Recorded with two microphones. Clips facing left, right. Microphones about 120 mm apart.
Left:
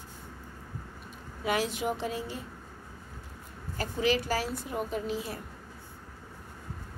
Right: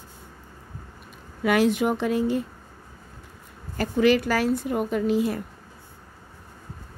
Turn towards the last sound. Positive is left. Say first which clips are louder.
# right 10 dB
turn(degrees=-65)  # may be behind; listen again after turning